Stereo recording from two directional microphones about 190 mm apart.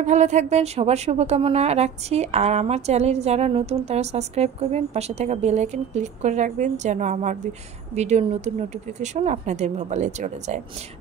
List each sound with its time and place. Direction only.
0.0 s a woman's voice: 40° right (ahead or behind)